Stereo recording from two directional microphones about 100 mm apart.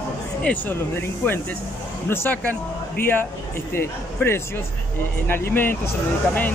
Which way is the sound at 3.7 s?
25° left (ahead or behind).